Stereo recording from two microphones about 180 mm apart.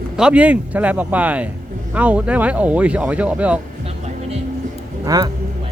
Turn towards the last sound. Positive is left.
turn(degrees=-20)  # may be behind; listen again after turning